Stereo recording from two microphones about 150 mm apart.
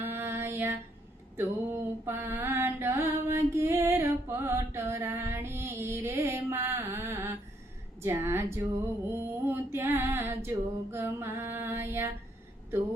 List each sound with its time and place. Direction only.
0.0 s mantra: 15° right (ahead or behind)
8.0 s a woman's voice: 15° right (ahead or behind)
9.0 s a sound: 15° right (ahead or behind)
10.9 s female singing: 15° right (ahead or behind)